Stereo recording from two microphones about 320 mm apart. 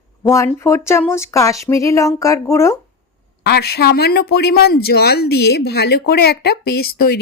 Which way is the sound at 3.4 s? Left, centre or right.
Left.